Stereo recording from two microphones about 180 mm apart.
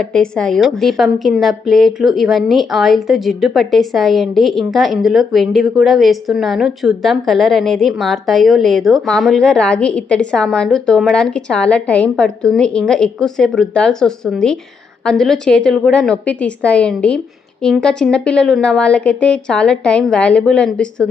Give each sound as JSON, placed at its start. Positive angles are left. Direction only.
{"t": 0.0, "sound": "a woman's voice", "side_deg": 5}